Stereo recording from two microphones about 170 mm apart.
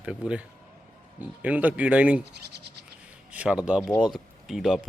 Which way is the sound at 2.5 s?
75° right (ahead or behind).